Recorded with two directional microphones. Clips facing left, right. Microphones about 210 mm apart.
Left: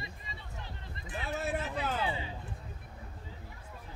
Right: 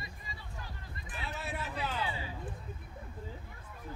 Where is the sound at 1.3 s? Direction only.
45° left (ahead or behind).